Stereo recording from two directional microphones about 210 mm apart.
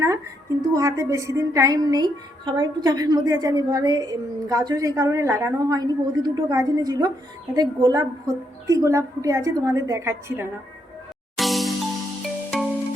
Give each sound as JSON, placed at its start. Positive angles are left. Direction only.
{"t": 0.7, "sound": "a woman's voice", "side_deg": -15}
{"t": 11.3, "sound": "music", "side_deg": 0}